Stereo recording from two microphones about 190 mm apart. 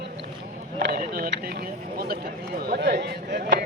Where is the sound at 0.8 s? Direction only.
55° right (ahead or behind).